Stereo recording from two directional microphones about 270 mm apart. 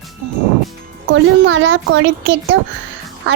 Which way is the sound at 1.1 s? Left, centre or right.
Right.